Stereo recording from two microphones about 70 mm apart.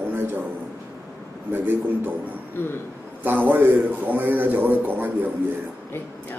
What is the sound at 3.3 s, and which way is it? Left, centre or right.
Speech, right.